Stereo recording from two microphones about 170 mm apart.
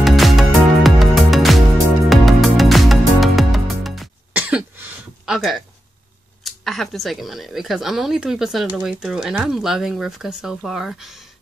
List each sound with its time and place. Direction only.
0.0 s music: centre (ahead or behind)
4.3 s cough: 10° right (ahead or behind)
6.4 s speech: centre (ahead or behind)